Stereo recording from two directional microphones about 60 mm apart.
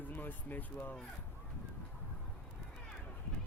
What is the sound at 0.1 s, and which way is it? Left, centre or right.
Speech, left.